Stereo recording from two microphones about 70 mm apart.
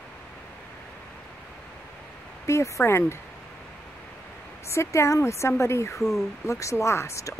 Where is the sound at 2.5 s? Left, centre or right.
Left.